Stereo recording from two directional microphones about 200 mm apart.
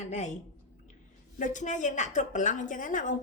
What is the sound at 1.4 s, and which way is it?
A woman's voice, 40° left (ahead or behind).